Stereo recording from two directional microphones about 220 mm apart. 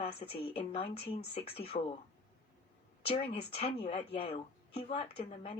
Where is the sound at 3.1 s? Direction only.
30° left (ahead or behind).